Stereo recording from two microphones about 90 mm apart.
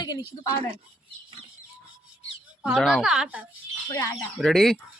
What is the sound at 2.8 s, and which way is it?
Speech, centre (ahead or behind).